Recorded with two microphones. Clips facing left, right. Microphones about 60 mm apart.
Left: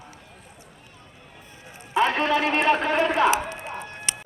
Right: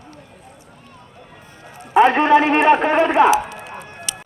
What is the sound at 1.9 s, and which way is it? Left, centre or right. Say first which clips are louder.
A man's voice: right 9 dB; right.